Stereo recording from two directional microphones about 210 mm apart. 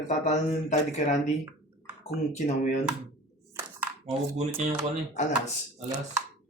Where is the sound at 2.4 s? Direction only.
30° left (ahead or behind).